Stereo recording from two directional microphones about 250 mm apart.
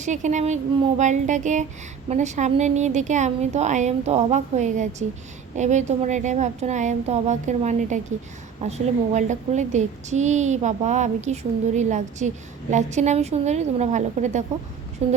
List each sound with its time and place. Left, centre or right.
0.0 s a woman's voice: right